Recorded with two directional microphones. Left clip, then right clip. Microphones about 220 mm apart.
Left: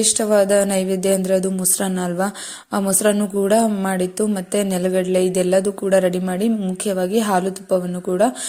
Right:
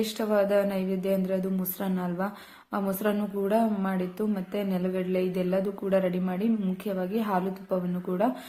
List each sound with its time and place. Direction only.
0.2 s a woman's voice: 30° left (ahead or behind)